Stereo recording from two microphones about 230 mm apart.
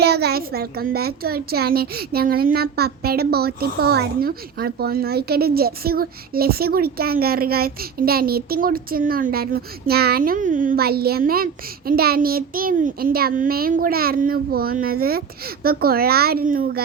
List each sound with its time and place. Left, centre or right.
0.0 s a child's voice: right